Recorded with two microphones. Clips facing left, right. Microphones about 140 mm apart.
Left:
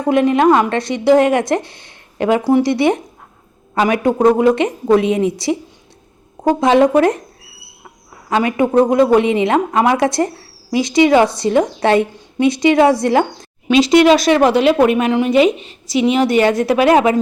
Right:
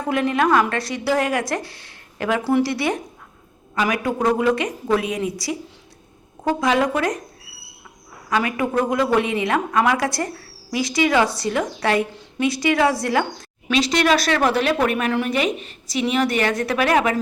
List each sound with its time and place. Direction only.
0.0 s a woman's voice: 20° left (ahead or behind)
8.3 s a woman's voice: 25° left (ahead or behind)
14.3 s a woman's voice: 20° left (ahead or behind)